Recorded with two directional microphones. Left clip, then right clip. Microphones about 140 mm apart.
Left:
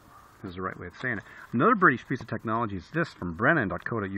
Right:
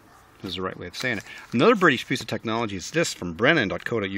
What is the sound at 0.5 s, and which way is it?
Speech, 40° right (ahead or behind).